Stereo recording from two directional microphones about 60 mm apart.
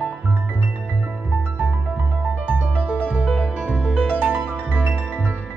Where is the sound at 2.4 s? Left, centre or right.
Right.